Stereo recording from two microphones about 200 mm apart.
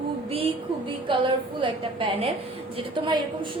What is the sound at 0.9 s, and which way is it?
A woman's voice, 25° right (ahead or behind).